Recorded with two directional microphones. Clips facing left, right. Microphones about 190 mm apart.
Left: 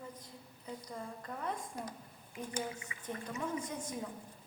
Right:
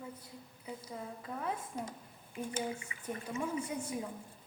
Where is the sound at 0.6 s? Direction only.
5° right (ahead or behind).